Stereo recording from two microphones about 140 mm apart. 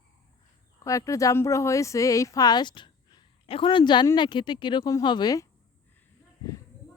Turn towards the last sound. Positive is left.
turn(degrees=30)  # may be behind; listen again after turning